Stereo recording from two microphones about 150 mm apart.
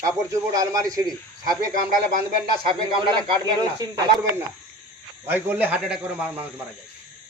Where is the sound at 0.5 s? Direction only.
25° right (ahead or behind).